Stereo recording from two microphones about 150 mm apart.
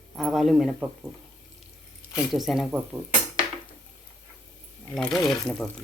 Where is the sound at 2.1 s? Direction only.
Centre (ahead or behind).